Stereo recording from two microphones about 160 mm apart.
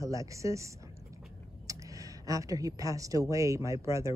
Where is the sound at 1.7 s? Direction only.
20° right (ahead or behind).